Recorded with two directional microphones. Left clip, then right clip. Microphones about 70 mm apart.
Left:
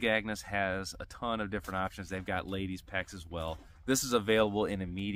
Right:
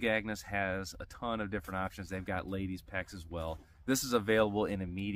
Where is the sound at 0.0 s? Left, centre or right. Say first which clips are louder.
Left 2 dB; left.